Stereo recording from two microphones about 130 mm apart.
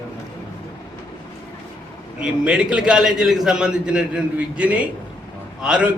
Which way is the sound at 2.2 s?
5° right (ahead or behind).